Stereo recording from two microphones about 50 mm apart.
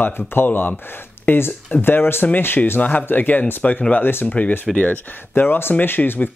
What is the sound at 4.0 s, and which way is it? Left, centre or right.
Speech, left.